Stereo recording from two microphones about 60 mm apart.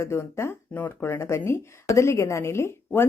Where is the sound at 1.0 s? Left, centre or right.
Left.